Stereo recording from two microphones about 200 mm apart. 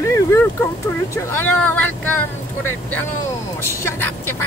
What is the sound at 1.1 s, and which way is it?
Speech, 10° left (ahead or behind).